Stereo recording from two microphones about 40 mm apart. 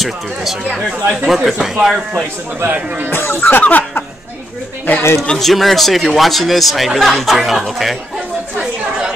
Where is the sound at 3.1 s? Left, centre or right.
Left.